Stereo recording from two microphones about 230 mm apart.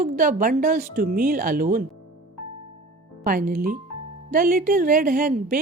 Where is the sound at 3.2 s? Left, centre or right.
Right.